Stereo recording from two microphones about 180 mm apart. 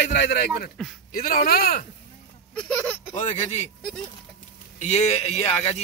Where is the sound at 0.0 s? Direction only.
70° left (ahead or behind); by 1.9 s 55° left (ahead or behind).